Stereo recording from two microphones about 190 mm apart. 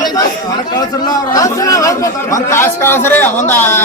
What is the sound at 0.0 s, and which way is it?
Chatter, 20° left (ahead or behind).